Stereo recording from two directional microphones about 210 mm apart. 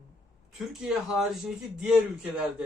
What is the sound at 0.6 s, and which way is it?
Speech, centre (ahead or behind).